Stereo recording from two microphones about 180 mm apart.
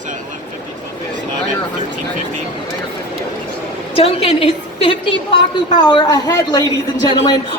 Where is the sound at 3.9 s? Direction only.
30° left (ahead or behind).